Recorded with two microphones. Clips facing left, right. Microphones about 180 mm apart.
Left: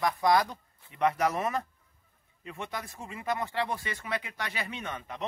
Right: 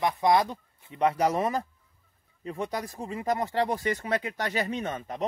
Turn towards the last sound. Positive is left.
turn(degrees=-35)  # may be behind; listen again after turning